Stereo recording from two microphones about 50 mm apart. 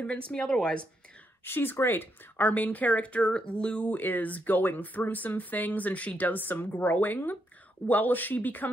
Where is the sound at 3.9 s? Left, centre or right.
Left.